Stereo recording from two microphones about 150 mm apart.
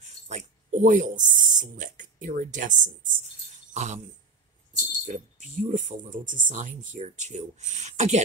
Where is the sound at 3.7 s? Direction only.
50° right (ahead or behind).